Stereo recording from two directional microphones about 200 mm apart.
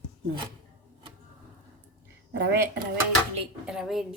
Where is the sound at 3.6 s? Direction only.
5° right (ahead or behind).